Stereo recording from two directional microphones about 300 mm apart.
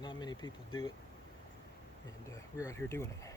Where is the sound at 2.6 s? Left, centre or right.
Centre.